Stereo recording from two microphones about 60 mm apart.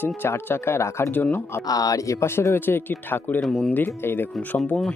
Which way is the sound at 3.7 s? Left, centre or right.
Left.